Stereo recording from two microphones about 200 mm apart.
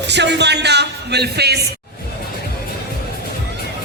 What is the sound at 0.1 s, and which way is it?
Speech, 60° right (ahead or behind).